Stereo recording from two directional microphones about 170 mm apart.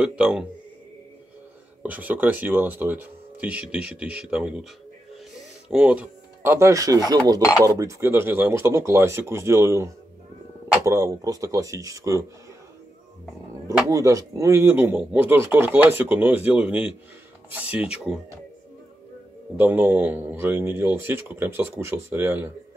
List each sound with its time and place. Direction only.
0.0 s speech: 5° right (ahead or behind)
1.8 s speech: 10° right (ahead or behind)
5.7 s speech: 5° right (ahead or behind)
13.8 s speech: 20° right (ahead or behind)
19.5 s speech: 10° right (ahead or behind)